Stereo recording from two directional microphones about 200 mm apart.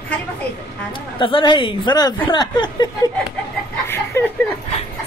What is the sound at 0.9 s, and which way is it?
Speech, 25° left (ahead or behind).